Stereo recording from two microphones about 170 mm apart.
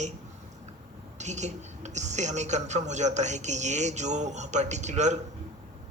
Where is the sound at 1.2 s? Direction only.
45° right (ahead or behind).